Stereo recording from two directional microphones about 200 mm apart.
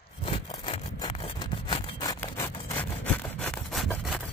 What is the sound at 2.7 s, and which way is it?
Sawing, 5° left (ahead or behind).